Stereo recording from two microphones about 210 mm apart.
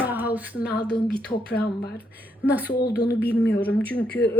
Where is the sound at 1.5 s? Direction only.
50° left (ahead or behind).